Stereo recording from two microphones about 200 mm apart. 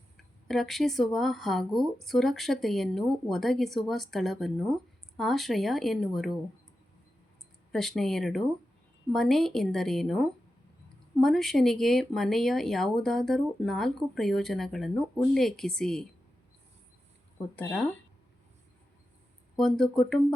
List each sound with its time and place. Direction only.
0.4 s speech: centre (ahead or behind)
7.7 s speech: centre (ahead or behind)
17.5 s speech: 10° left (ahead or behind)
19.5 s speech: centre (ahead or behind)